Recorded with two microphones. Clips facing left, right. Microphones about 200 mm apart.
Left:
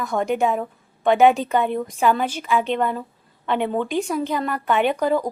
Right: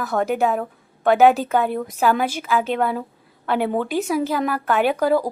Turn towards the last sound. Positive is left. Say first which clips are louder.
# right 1 dB
turn(degrees=-5)  # may be behind; listen again after turning